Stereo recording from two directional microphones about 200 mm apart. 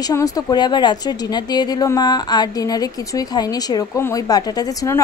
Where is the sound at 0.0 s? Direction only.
20° left (ahead or behind).